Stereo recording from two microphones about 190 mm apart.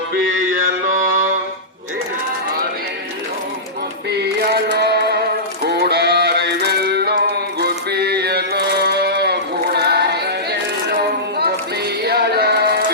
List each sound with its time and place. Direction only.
0.1 s music: 45° right (ahead or behind)
4.1 s mantra: 60° right (ahead or behind)
5.6 s music: 60° right (ahead or behind)
7.6 s mantra: 60° right (ahead or behind)
12.0 s music: 60° right (ahead or behind)